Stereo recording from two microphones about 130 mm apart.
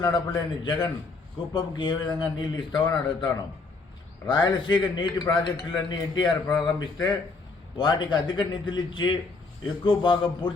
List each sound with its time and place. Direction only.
0.0 s a man's voice: 35° left (ahead or behind)